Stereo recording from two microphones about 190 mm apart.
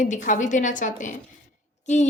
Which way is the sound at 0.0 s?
40° left (ahead or behind).